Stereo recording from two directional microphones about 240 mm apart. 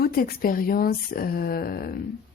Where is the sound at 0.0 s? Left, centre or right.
Left.